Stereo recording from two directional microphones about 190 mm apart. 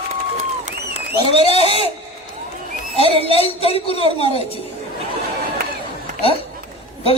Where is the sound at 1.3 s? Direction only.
30° left (ahead or behind).